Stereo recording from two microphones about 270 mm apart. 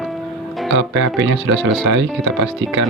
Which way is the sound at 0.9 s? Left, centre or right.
Right.